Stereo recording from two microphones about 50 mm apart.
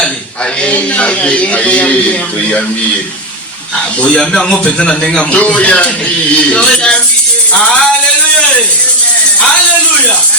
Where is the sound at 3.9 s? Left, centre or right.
Left.